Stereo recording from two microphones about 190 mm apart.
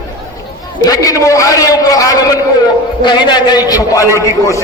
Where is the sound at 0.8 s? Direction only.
20° left (ahead or behind).